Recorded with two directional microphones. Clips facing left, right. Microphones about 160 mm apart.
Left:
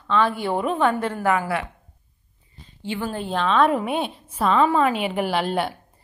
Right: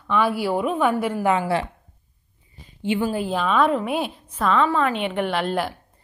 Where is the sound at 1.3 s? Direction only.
25° right (ahead or behind).